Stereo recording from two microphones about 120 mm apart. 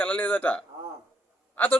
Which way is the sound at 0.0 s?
15° left (ahead or behind).